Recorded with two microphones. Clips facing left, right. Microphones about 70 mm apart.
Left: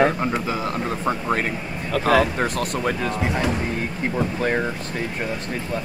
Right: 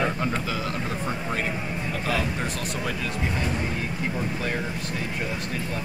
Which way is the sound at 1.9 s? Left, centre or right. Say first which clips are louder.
Left 11 dB; left.